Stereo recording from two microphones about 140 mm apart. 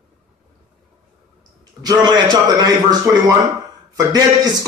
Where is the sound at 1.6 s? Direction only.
30° right (ahead or behind).